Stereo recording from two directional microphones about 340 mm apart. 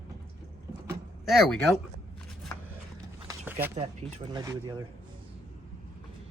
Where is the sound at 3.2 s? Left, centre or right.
Centre.